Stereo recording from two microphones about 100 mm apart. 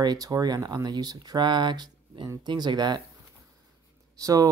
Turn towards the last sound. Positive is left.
turn(degrees=-35)  # may be behind; listen again after turning